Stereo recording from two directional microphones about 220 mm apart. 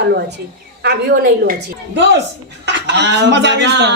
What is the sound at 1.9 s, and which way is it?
Speech, 50° right (ahead or behind).